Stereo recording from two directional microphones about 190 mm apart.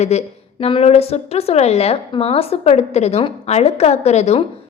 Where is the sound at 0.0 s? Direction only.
35° left (ahead or behind).